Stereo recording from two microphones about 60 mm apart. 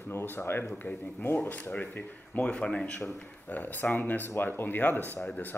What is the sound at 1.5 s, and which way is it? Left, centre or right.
Speech, left.